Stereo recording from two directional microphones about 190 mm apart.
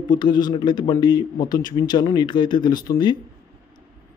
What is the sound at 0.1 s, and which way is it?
Speech, 25° left (ahead or behind).